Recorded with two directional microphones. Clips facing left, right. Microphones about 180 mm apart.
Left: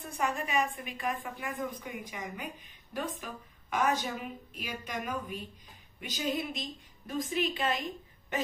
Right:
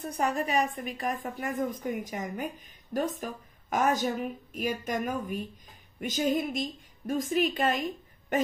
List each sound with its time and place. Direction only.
0.0 s a woman's voice: 40° right (ahead or behind)